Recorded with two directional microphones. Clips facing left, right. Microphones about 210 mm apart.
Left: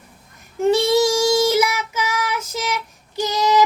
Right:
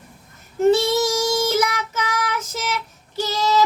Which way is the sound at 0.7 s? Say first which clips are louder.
Left 3 dB; 10° left (ahead or behind).